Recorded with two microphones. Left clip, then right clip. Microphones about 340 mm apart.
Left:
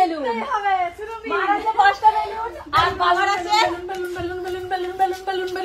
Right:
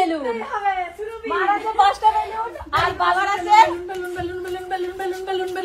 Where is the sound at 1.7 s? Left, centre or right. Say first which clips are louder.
Left 1 dB; right.